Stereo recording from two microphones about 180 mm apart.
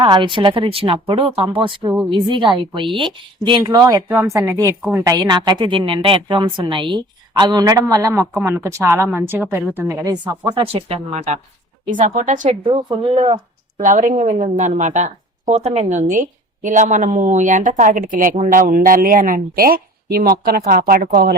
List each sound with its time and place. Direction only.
0.0 s a woman's voice: 25° right (ahead or behind)
11.9 s a woman's voice: 45° right (ahead or behind)
12.6 s a woman's voice: 25° right (ahead or behind)
13.7 s a woman's voice: 45° right (ahead or behind)